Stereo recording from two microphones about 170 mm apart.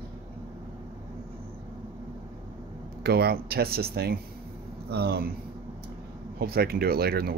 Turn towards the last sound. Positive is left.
turn(degrees=-65)  # may be behind; listen again after turning